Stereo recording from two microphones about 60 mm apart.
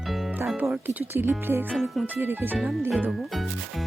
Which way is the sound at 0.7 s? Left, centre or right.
Right.